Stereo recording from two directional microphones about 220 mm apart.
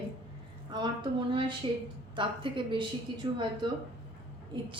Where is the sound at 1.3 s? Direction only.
20° right (ahead or behind).